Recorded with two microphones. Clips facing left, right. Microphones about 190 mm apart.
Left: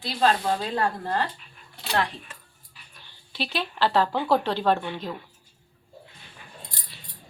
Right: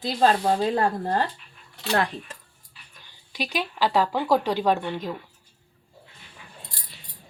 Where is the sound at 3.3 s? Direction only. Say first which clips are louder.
Right 1 dB; 15° right (ahead or behind).